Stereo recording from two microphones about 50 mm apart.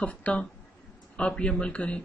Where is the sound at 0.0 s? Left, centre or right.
Left.